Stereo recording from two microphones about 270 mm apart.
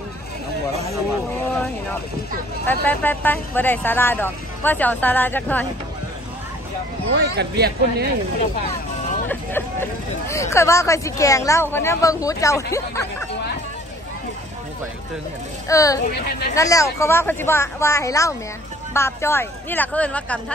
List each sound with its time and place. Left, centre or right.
2.6 s speech: centre
7.2 s speech: right
9.3 s speech: centre
15.7 s speech: centre